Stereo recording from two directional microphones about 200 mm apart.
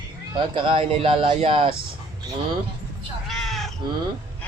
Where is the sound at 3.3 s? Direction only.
Centre (ahead or behind).